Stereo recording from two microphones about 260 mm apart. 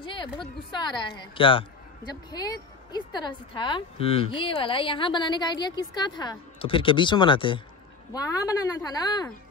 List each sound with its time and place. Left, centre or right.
0.0 s a woman's voice: centre